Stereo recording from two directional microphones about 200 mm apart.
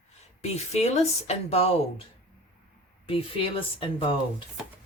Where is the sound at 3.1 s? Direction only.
30° left (ahead or behind).